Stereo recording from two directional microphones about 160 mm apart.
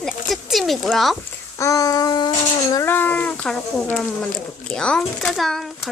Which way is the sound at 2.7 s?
15° left (ahead or behind).